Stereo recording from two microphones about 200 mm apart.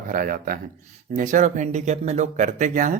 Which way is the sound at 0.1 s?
45° right (ahead or behind).